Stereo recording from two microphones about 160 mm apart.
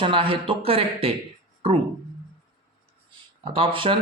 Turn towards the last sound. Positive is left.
turn(degrees=-30)  # may be behind; listen again after turning